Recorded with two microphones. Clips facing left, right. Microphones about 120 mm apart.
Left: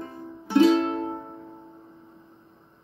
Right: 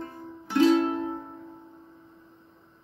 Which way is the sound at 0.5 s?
30° left (ahead or behind).